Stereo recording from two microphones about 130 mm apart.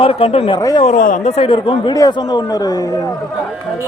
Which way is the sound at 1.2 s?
50° left (ahead or behind).